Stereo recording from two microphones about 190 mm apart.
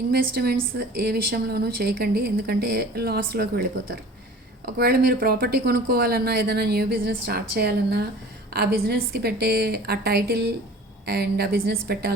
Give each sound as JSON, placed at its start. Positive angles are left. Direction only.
{"t": 0.1, "sound": "a woman's voice", "side_deg": -55}